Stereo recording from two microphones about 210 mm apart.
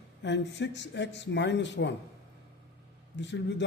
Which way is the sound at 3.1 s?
55° left (ahead or behind).